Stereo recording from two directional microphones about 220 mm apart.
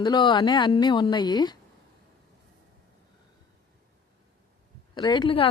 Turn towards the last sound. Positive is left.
turn(degrees=20)  # may be behind; listen again after turning